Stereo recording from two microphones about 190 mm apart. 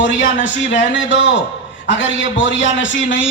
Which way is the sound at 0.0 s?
75° left (ahead or behind).